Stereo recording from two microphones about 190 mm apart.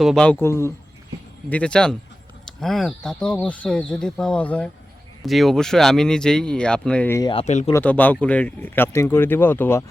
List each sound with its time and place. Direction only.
0.0 s speech: centre (ahead or behind)
7.2 s speech: 25° left (ahead or behind)
7.4 s speech: 35° left (ahead or behind)
7.7 s speech: 10° left (ahead or behind)